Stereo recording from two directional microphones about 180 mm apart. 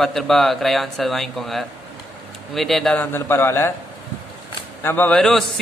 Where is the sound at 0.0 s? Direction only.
Centre (ahead or behind).